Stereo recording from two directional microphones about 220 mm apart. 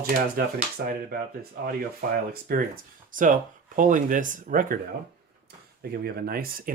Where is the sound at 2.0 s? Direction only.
40° right (ahead or behind).